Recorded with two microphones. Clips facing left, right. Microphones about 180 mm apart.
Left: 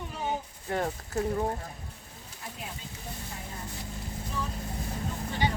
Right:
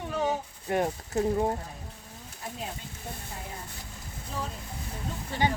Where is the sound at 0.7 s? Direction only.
20° right (ahead or behind).